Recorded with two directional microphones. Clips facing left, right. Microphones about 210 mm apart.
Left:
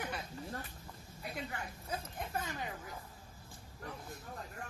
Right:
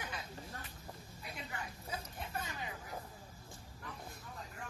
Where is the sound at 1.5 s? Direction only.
50° left (ahead or behind).